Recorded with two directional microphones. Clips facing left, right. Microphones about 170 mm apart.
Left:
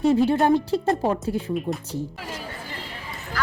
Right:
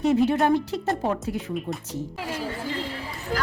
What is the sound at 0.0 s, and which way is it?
Speech, 30° left (ahead or behind).